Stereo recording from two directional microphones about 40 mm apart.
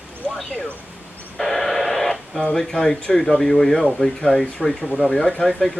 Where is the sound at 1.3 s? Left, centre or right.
Centre.